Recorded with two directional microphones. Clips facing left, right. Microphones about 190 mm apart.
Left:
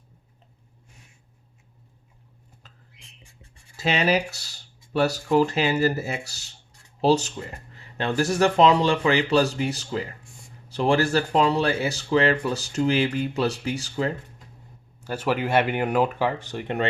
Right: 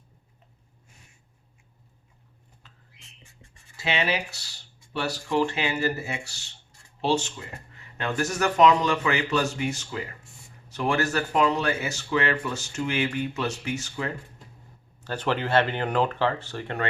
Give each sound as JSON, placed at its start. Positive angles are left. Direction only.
{"t": 3.8, "sound": "speech", "side_deg": 40}
{"t": 15.0, "sound": "speech", "side_deg": 10}